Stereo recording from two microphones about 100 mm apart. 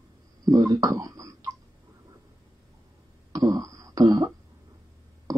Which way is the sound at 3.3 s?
40° right (ahead or behind).